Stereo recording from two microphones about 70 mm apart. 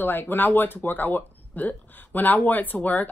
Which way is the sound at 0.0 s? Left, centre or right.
Left.